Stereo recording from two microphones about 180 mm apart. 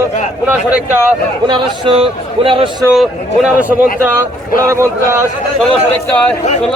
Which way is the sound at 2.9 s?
5° right (ahead or behind).